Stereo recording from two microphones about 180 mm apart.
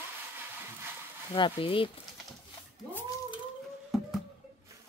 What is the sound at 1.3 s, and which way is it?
Speech, 30° left (ahead or behind).